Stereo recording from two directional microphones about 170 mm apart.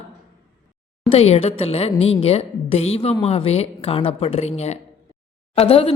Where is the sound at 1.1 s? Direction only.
35° left (ahead or behind).